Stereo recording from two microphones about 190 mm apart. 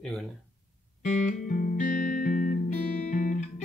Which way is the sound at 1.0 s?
45° left (ahead or behind).